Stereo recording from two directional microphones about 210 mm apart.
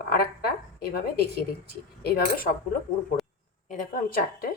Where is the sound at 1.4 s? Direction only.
45° left (ahead or behind).